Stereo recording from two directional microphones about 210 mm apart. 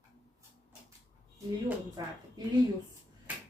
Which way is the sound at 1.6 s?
15° right (ahead or behind).